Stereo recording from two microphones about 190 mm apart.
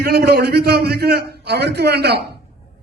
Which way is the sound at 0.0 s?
55° right (ahead or behind).